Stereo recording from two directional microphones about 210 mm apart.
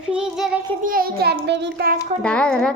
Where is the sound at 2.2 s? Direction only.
5° left (ahead or behind).